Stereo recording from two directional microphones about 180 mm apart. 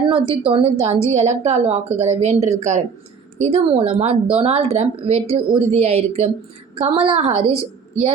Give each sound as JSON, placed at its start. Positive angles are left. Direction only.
{"t": 0.1, "sound": "a woman's voice", "side_deg": -30}